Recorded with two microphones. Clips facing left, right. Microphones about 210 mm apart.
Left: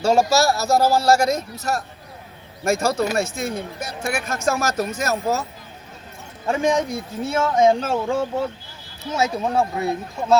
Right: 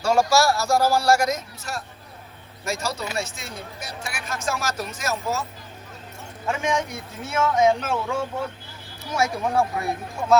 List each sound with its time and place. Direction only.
0.0 s a man's voice: 25° left (ahead or behind); by 5.5 s 40° left (ahead or behind)
6.5 s a man's voice: 35° left (ahead or behind)